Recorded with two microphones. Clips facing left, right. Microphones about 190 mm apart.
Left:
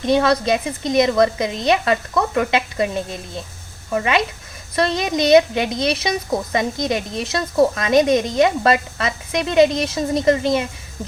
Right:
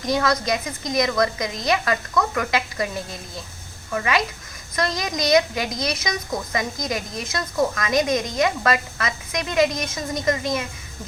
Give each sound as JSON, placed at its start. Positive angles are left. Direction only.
{"t": 0.0, "sound": "a woman's voice", "side_deg": 25}